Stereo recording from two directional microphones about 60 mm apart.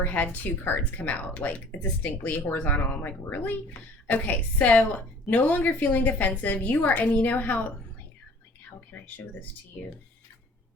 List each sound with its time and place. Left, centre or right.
0.0 s a woman's voice: left
8.9 s speech: left